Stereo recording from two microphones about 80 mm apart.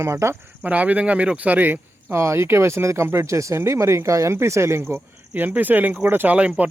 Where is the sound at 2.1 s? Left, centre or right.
Right.